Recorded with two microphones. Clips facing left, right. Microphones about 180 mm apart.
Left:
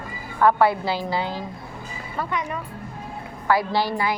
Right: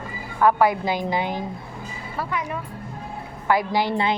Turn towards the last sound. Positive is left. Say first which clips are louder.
# right 1 dB
turn(degrees=-25)  # may be behind; listen again after turning